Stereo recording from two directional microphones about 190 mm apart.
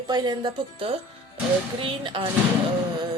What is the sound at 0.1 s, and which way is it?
A woman's voice, 20° right (ahead or behind).